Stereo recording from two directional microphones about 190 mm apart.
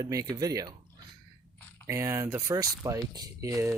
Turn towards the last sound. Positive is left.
turn(degrees=-15)  # may be behind; listen again after turning